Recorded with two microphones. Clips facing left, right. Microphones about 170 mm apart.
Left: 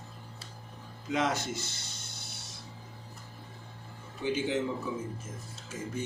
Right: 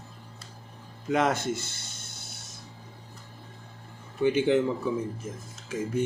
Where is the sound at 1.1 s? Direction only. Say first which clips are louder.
Right 5 dB; 55° right (ahead or behind).